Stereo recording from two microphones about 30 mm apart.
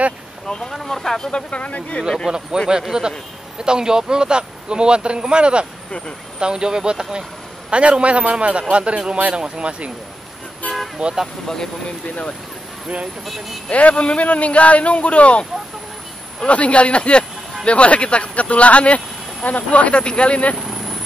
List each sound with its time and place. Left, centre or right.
0.7 s speech: centre
1.3 s speech: left
2.3 s a man's voice: right
5.9 s speech: left
6.4 s a man's voice: right
7.7 s a man's voice: right
11.0 s a man's voice: right
11.4 s speech: centre
13.2 s speech: centre
13.7 s speech: left
16.4 s speech: left
20.0 s speech: left
20.5 s vehicle: centre